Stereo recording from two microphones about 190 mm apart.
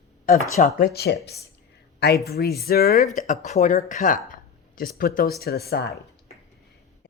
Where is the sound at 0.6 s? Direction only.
55° left (ahead or behind).